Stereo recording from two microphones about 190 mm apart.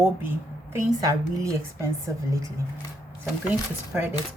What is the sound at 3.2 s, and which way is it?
Speech, 10° right (ahead or behind).